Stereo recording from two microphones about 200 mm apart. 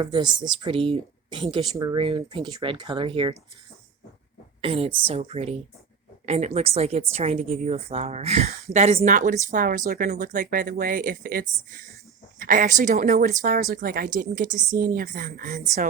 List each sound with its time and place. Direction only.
0.0 s speech: 25° right (ahead or behind)
4.6 s a woman's voice: 30° right (ahead or behind)